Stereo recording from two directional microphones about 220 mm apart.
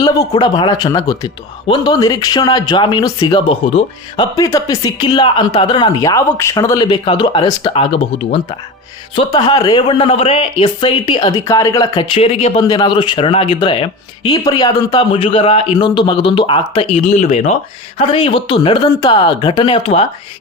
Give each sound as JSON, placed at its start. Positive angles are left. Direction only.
{"t": 0.0, "sound": "a man's voice", "side_deg": 15}